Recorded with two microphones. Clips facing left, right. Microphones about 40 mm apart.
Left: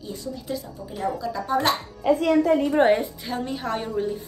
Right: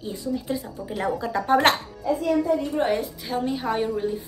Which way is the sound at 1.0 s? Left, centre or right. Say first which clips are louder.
Right 2 dB; right.